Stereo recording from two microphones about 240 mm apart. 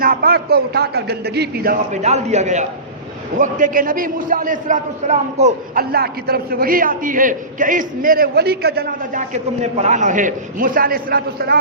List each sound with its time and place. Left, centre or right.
0.0 s a man's voice: right